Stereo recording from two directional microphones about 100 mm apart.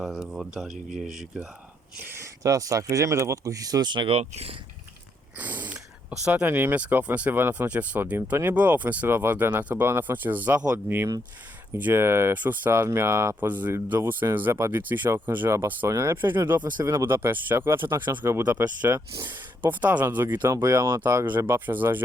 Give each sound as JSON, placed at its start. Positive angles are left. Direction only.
{"t": 0.0, "sound": "speech", "side_deg": -5}
{"t": 2.0, "sound": "speech", "side_deg": -30}
{"t": 4.1, "sound": "speech", "side_deg": -85}
{"t": 5.4, "sound": "a sound", "side_deg": -15}
{"t": 6.3, "sound": "speech", "side_deg": -15}
{"t": 13.5, "sound": "speech", "side_deg": -15}
{"t": 15.4, "sound": "speech", "side_deg": -30}
{"t": 18.9, "sound": "speech", "side_deg": -30}
{"t": 19.6, "sound": "speech", "side_deg": -15}
{"t": 20.5, "sound": "speech", "side_deg": -35}
{"t": 21.0, "sound": "speech", "side_deg": -20}